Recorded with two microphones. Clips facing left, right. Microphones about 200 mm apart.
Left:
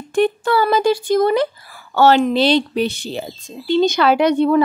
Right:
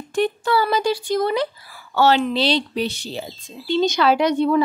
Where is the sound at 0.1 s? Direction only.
55° left (ahead or behind).